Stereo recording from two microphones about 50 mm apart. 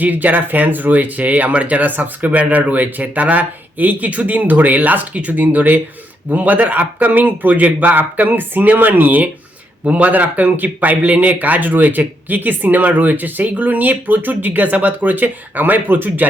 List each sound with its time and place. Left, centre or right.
0.0 s speech: right